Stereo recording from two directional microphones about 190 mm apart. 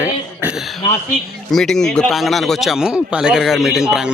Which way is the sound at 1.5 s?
Centre (ahead or behind).